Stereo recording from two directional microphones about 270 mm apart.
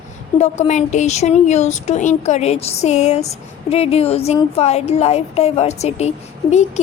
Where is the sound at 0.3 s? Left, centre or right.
Left.